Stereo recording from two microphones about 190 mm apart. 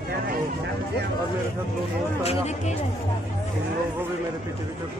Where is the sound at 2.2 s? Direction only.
35° left (ahead or behind).